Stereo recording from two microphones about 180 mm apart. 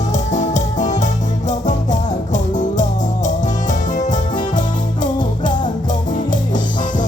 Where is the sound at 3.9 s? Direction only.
45° left (ahead or behind).